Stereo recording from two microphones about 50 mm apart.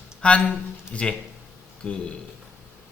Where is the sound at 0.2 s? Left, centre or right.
Left.